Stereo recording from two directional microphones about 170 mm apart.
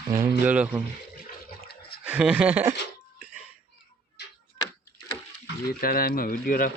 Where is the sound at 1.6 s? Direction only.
65° left (ahead or behind).